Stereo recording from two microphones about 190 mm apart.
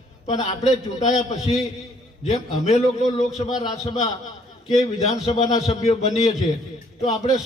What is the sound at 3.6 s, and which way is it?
Speech, 20° left (ahead or behind).